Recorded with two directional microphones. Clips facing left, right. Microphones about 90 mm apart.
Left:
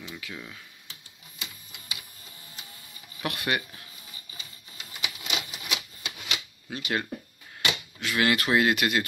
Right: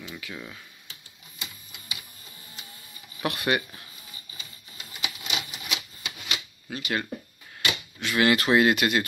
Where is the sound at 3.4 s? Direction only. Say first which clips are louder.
Right 3 dB; 15° right (ahead or behind).